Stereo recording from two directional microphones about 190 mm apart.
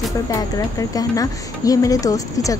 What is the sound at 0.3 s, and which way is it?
A woman's voice, 20° left (ahead or behind).